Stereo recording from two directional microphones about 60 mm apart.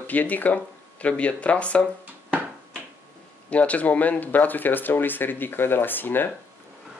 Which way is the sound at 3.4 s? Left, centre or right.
Left.